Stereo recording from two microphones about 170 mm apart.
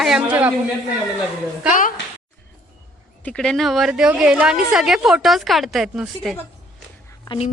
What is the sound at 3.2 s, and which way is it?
A woman's voice, 5° left (ahead or behind).